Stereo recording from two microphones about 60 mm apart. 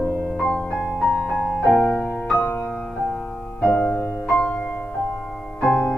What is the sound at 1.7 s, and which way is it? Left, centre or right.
Music, centre.